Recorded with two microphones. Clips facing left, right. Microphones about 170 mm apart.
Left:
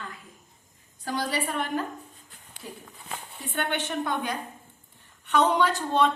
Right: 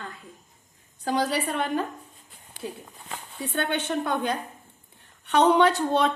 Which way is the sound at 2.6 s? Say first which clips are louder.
Right 6 dB; 75° right (ahead or behind).